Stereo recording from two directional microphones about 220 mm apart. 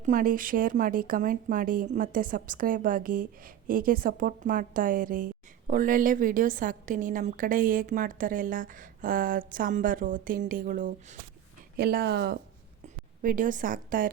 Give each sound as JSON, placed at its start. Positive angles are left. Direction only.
{"t": 0.0, "sound": "speech", "side_deg": -35}
{"t": 11.8, "sound": "speech", "side_deg": -45}
{"t": 13.2, "sound": "speech", "side_deg": -35}